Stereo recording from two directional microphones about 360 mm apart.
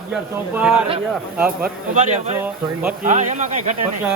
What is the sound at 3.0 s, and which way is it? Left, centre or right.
Speech, centre.